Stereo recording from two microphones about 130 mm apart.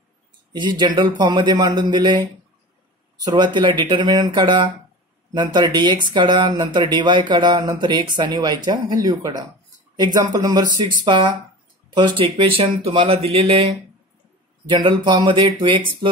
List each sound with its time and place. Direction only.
0.5 s speech: 35° right (ahead or behind)
3.3 s speech: 35° right (ahead or behind)
14.7 s speech: 35° right (ahead or behind)